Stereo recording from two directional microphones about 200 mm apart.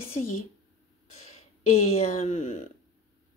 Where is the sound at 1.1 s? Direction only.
35° left (ahead or behind).